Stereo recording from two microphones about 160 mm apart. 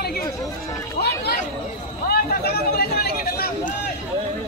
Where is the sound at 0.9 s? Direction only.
90° left.